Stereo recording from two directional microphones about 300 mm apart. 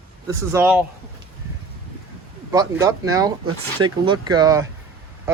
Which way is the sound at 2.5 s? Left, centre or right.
Centre.